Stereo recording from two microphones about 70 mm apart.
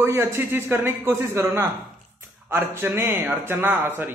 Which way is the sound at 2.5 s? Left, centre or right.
Right.